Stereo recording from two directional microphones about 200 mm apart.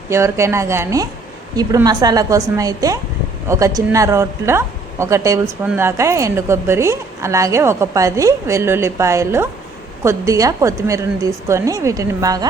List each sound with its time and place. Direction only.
0.1 s speech: 15° right (ahead or behind)